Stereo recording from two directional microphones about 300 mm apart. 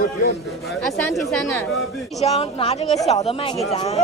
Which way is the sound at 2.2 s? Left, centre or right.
Centre.